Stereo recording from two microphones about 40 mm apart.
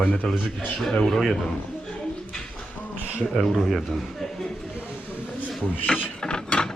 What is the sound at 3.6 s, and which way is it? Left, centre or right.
Speech, centre.